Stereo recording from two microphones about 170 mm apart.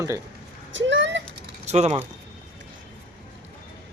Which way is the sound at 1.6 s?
40° right (ahead or behind).